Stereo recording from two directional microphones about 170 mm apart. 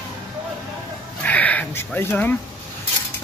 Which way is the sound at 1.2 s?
10° left (ahead or behind).